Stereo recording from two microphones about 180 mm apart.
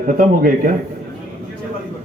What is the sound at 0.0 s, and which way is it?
Speech, 50° right (ahead or behind).